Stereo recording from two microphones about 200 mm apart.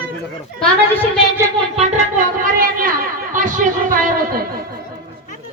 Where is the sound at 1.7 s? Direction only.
35° right (ahead or behind); by 4.8 s 50° right (ahead or behind).